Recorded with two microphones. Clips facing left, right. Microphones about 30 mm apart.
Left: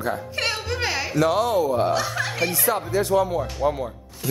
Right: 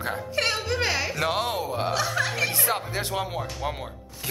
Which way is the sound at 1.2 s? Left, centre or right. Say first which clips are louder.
Left 6 dB; right.